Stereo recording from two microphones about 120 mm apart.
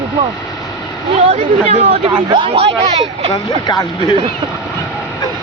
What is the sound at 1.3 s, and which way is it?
Speech, 60° right (ahead or behind).